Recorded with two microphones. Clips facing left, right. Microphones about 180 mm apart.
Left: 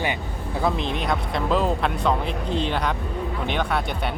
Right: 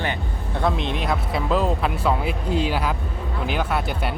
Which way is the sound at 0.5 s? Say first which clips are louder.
Right 1 dB; centre (ahead or behind).